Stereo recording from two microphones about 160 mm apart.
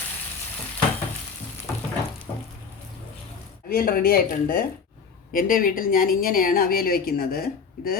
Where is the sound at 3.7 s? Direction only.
65° left (ahead or behind).